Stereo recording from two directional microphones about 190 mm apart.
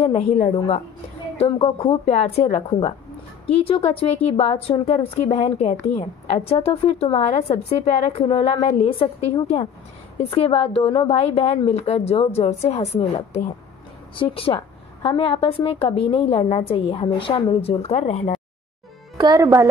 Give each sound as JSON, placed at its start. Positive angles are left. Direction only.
{"t": 0.0, "sound": "a woman's voice", "side_deg": 35}
{"t": 10.3, "sound": "a woman's voice", "side_deg": 30}
{"t": 19.1, "sound": "a woman's voice", "side_deg": -20}